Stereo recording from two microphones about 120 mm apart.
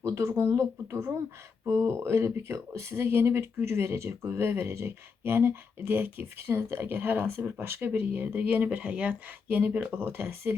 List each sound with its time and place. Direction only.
0.0 s speech: 25° right (ahead or behind)